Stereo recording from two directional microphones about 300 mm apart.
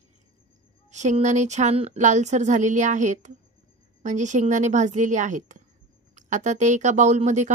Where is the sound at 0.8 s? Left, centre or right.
Right.